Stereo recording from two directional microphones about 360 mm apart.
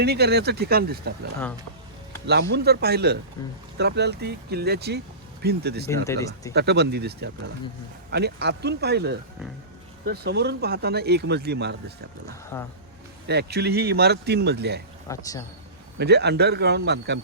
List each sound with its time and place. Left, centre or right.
0.0 s speech: right
2.2 s speech: right
6.1 s speech: centre
6.5 s speech: right
12.5 s speech: centre
13.2 s speech: right
15.0 s speech: centre
16.0 s speech: right